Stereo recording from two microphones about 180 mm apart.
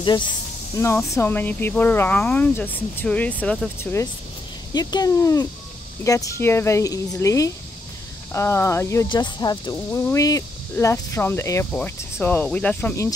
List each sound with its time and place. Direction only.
0.7 s speech: 15° left (ahead or behind)